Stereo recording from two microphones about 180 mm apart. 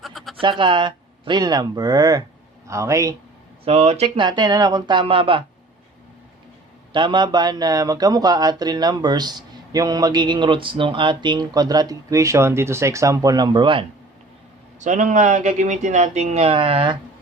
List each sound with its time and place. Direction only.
0.0 s bleat: centre (ahead or behind)
0.3 s a man's voice: 25° right (ahead or behind)
3.7 s speech: 35° right (ahead or behind)
6.9 s speech: 25° right (ahead or behind)
14.8 s speech: 45° right (ahead or behind); by 17.0 s 25° right (ahead or behind)